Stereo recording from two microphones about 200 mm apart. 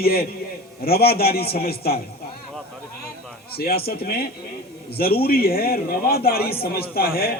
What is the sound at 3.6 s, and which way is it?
A man's voice, 50° left (ahead or behind).